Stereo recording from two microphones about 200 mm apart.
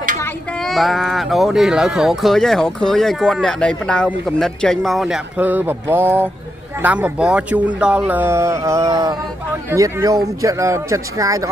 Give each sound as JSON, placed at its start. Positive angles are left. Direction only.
{"t": 0.6, "sound": "speech", "side_deg": 0}